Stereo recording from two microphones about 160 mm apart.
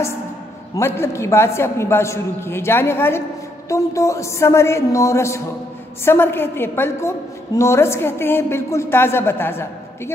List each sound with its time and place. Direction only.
0.7 s a man's voice: 15° left (ahead or behind)